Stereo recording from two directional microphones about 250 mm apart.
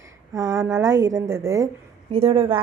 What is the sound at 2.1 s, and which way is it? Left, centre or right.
Speech, right.